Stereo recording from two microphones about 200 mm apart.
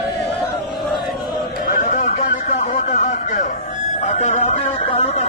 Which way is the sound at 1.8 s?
35° left (ahead or behind).